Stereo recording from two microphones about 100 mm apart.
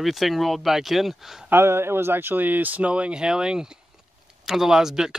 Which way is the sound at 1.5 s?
25° right (ahead or behind).